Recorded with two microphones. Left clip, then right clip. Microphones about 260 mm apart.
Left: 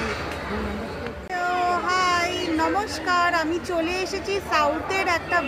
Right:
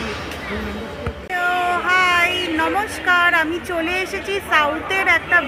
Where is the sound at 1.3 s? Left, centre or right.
Centre.